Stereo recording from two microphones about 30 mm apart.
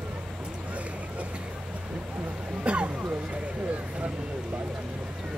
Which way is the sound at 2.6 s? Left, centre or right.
Right.